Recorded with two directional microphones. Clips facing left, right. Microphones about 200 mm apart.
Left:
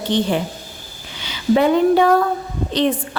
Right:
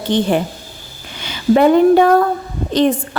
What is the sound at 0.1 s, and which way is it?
A woman's voice, 50° right (ahead or behind).